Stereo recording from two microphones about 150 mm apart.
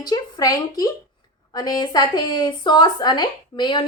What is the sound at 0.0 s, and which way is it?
A woman's voice, 25° left (ahead or behind).